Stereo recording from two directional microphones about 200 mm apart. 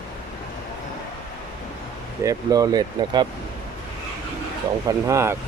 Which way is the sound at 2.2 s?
20° right (ahead or behind).